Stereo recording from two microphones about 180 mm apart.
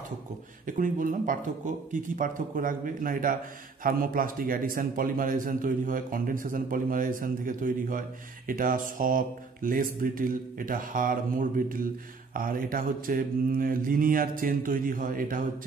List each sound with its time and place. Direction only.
0.7 s a man's voice: 45° right (ahead or behind)